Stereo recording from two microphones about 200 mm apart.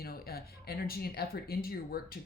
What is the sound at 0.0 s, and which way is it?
Speech, 50° left (ahead or behind).